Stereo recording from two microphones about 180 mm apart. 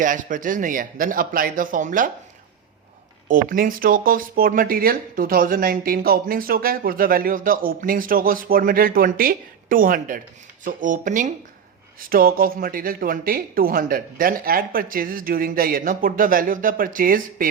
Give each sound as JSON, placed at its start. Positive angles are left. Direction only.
{"t": 0.0, "sound": "speech", "side_deg": -45}
{"t": 3.2, "sound": "speech", "side_deg": -50}